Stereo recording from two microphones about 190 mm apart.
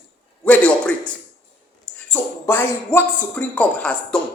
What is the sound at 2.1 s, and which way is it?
Speech, 10° left (ahead or behind).